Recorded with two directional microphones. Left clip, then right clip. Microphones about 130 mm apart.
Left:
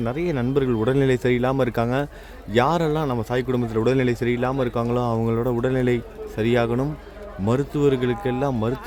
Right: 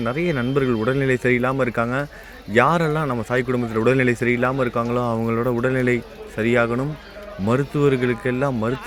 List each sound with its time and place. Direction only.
0.0 s speech: 20° left (ahead or behind)
5.1 s speech: 5° left (ahead or behind)
5.6 s speech: 25° left (ahead or behind)
7.4 s a man's voice: 5° left (ahead or behind)
7.9 s speech: 20° left (ahead or behind)